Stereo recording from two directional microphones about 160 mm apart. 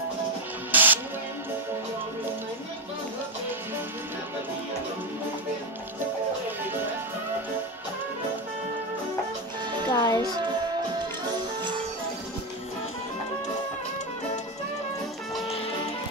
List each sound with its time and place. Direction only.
0.7 s music: 10° right (ahead or behind)
9.8 s music: 25° left (ahead or behind)